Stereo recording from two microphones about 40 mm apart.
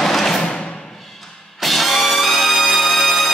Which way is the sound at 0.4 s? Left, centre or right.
Left.